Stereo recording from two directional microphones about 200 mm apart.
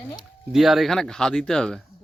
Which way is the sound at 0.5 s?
Centre (ahead or behind).